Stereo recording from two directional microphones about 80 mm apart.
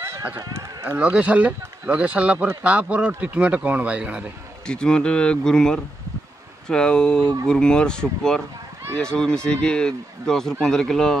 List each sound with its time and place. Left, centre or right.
0.4 s speech: right
0.9 s a man's voice: centre
4.6 s speech: centre